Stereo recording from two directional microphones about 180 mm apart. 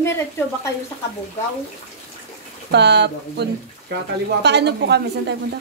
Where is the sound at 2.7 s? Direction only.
70° right (ahead or behind).